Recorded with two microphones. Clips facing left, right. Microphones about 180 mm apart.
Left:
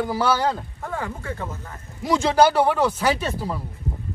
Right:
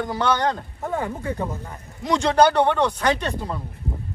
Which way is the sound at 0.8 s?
20° right (ahead or behind).